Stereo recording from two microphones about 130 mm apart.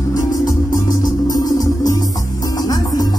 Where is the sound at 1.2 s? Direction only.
30° left (ahead or behind).